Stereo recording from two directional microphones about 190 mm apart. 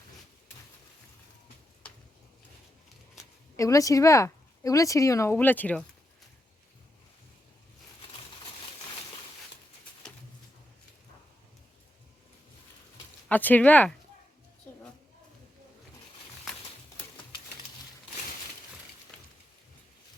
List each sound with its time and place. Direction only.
3.6 s speech: 15° left (ahead or behind)
13.2 s speech: 10° left (ahead or behind)